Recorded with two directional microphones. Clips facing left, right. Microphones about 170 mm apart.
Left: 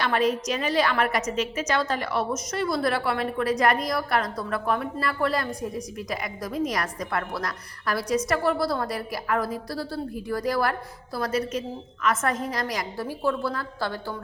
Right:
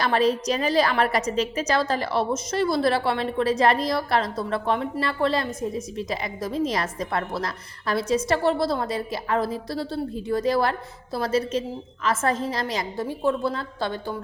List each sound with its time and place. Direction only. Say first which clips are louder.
0.0 s a woman's voice: right 2 dB; 30° right (ahead or behind)